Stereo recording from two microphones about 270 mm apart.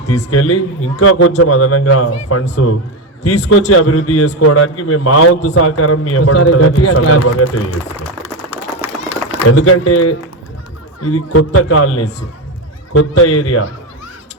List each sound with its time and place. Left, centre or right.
0.3 s a man's voice: left
2.5 s a man's voice: left
9.5 s a man's voice: left
11.3 s a man's voice: left